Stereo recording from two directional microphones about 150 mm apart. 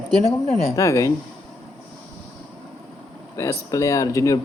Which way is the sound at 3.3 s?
20° left (ahead or behind).